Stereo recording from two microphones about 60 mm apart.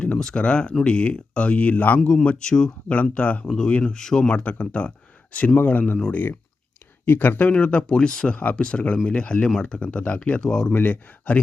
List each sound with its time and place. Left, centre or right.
0.0 s speech: centre
7.0 s speech: left; by 10.8 s centre
10.8 s speech: left